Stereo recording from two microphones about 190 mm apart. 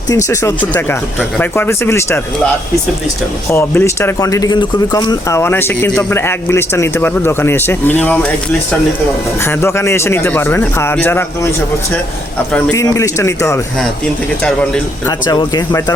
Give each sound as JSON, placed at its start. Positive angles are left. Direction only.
{"t": 0.3, "sound": "speech", "side_deg": 15}
{"t": 3.5, "sound": "speech", "side_deg": 10}
{"t": 9.4, "sound": "speech", "side_deg": 15}
{"t": 12.5, "sound": "speech", "side_deg": 15}
{"t": 15.0, "sound": "speech", "side_deg": 20}